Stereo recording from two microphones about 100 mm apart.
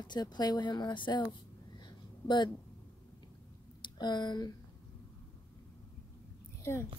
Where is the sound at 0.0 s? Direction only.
45° left (ahead or behind).